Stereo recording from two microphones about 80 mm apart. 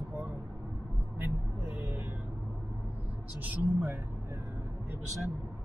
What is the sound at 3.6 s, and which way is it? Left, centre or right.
Speech, right.